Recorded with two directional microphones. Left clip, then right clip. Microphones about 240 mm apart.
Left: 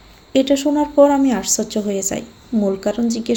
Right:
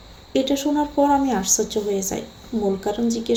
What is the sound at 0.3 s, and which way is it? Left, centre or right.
Speech, left.